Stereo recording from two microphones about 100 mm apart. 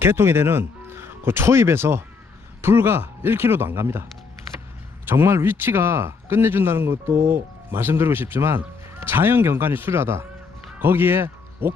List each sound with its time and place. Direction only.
0.0 s speech: 20° right (ahead or behind)
5.0 s speech: 25° right (ahead or behind)